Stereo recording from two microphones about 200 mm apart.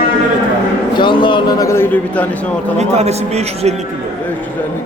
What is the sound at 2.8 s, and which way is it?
Speech, 35° right (ahead or behind).